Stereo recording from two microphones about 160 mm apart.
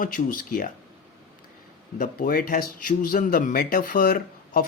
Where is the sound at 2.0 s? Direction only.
60° left (ahead or behind).